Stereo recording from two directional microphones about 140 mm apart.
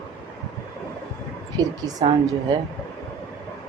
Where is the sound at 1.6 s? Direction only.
25° right (ahead or behind).